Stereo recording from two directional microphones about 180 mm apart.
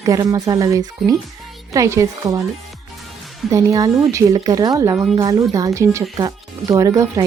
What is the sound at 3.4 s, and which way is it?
A woman's voice, 20° right (ahead or behind).